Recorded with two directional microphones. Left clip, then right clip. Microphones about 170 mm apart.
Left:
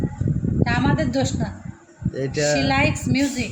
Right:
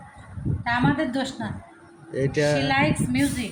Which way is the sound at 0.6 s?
55° left (ahead or behind).